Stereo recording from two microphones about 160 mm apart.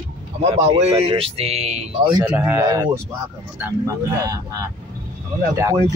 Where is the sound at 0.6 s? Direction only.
40° right (ahead or behind).